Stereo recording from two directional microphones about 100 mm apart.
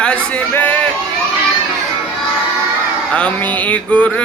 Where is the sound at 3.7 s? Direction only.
10° left (ahead or behind).